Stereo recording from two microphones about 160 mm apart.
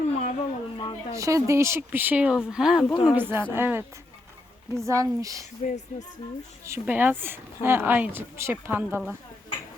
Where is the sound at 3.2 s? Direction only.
15° right (ahead or behind).